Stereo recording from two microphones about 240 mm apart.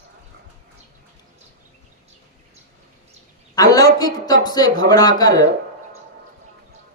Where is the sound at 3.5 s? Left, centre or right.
Centre.